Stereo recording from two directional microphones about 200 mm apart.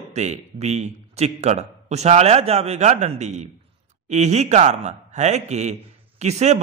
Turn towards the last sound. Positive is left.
turn(degrees=-35)  # may be behind; listen again after turning